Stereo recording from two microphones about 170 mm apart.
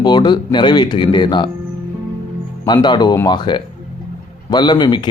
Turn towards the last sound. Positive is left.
turn(degrees=25)  # may be behind; listen again after turning